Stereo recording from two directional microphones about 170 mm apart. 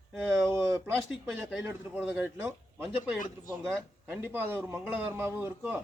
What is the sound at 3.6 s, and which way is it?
Speech, centre (ahead or behind).